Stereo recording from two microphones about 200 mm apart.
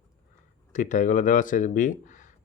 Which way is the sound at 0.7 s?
40° left (ahead or behind).